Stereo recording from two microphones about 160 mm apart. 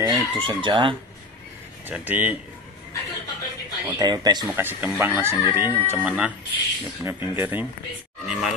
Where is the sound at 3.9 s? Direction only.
25° right (ahead or behind).